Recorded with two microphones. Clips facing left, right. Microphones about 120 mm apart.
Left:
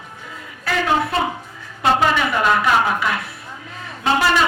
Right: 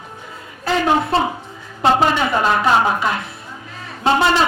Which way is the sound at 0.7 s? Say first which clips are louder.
Right 3 dB; 30° right (ahead or behind).